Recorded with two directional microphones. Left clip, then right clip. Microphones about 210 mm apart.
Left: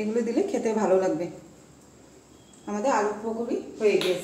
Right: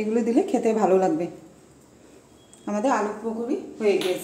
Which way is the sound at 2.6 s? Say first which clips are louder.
Right 4 dB; 50° right (ahead or behind).